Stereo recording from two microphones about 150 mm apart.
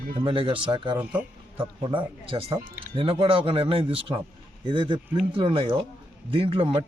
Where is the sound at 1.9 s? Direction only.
35° right (ahead or behind).